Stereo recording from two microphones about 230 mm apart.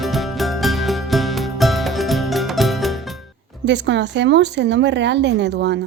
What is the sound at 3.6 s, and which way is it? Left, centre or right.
Speech, right.